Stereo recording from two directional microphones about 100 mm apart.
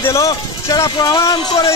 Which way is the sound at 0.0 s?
30° left (ahead or behind).